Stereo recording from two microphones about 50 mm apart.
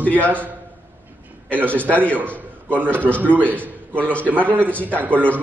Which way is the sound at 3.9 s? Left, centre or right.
Left.